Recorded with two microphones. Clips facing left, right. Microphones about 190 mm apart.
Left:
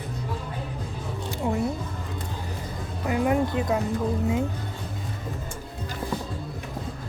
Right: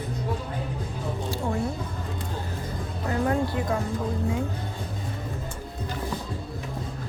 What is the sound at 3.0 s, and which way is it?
Music, 15° left (ahead or behind).